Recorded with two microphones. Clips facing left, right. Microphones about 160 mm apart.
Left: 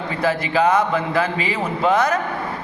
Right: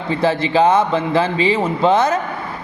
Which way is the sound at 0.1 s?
25° right (ahead or behind).